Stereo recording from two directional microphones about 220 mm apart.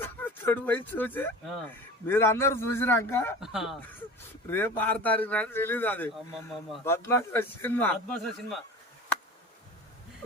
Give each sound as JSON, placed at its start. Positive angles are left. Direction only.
{"t": 0.0, "sound": "speech", "side_deg": 10}
{"t": 3.4, "sound": "speech", "side_deg": 0}
{"t": 4.4, "sound": "speech", "side_deg": 10}
{"t": 6.8, "sound": "speech", "side_deg": 10}